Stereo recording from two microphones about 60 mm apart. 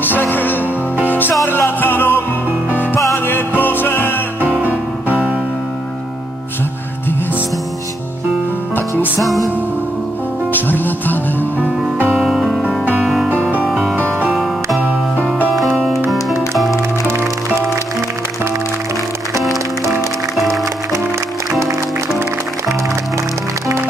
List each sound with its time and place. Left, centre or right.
0.0 s music: left
3.3 s music: left
4.6 s music: right
8.7 s music: left
10.5 s music: left
12.2 s music: centre
17.1 s music: right